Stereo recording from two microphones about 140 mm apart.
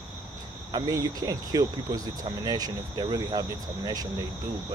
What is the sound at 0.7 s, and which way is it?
Speech, 25° right (ahead or behind).